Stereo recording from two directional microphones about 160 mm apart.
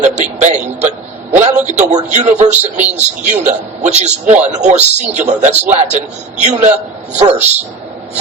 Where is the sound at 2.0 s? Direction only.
50° right (ahead or behind).